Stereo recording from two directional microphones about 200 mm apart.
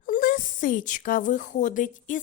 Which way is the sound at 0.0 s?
45° left (ahead or behind).